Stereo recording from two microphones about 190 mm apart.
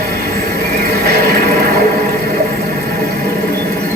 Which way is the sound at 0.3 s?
55° right (ahead or behind).